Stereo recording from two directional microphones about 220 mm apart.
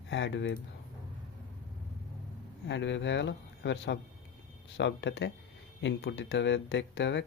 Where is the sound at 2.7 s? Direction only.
55° left (ahead or behind).